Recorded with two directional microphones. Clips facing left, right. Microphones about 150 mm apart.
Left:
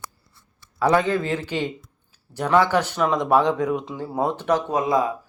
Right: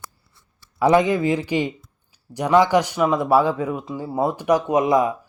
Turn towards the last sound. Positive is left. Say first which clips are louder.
# right 3 dB
turn(degrees=-20)  # may be behind; listen again after turning